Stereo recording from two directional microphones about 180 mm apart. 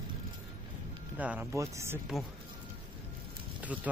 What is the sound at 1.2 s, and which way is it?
Speech, 10° right (ahead or behind).